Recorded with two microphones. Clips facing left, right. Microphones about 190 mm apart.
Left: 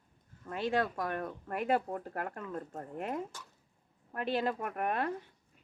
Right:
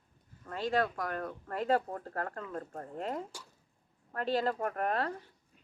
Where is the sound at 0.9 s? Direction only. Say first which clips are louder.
Left 1 dB; 25° left (ahead or behind).